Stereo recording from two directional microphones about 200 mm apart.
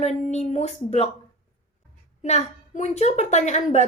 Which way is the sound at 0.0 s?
35° left (ahead or behind).